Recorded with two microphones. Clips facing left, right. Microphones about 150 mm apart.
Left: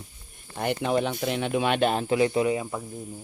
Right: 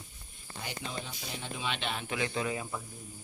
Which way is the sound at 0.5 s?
60° left (ahead or behind).